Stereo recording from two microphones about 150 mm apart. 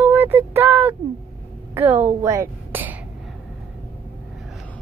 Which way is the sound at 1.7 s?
15° right (ahead or behind).